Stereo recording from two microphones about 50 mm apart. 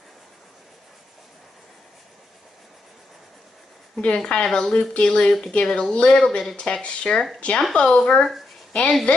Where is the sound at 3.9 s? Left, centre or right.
Centre.